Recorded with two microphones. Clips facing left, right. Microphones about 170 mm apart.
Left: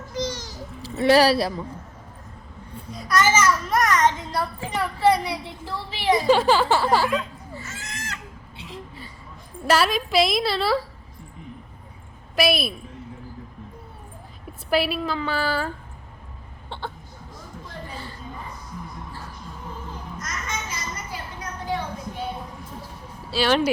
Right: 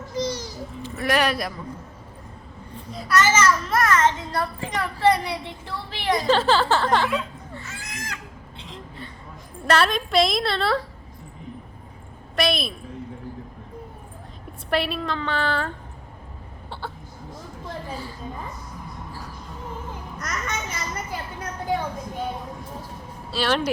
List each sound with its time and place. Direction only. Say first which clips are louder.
0.2 s babbling: right 2 dB; 10° right (ahead or behind)
0.8 s speech: left 6 dB; 30° left (ahead or behind)
3.2 s a child's voice: even; 10° left (ahead or behind)
7.8 s fowl: even; 10° right (ahead or behind)
8.5 s a sound: left 1 dB; 5° left (ahead or behind)
9.6 s a woman's voice: even; 5° left (ahead or behind)
12.4 s a child's voice: left 2 dB; 5° left (ahead or behind)
14.7 s a woman's voice: left 2 dB; 5° left (ahead or behind)
17.9 s a sound: right 3 dB; 10° right (ahead or behind)
20.1 s children playing: right 3 dB; 60° right (ahead or behind)
23.3 s a woman's voice: left 3 dB; centre (ahead or behind)